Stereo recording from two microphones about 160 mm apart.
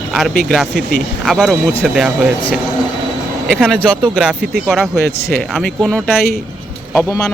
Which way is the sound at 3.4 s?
Centre (ahead or behind).